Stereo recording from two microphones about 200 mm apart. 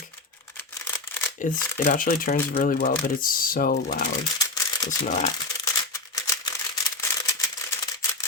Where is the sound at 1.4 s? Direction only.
40° left (ahead or behind).